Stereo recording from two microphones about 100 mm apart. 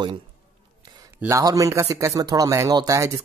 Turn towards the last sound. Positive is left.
turn(degrees=-35)  # may be behind; listen again after turning